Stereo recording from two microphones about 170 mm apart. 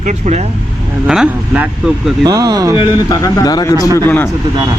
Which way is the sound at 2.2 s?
25° right (ahead or behind).